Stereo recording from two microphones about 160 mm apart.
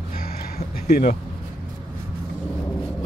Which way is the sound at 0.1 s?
65° left (ahead or behind).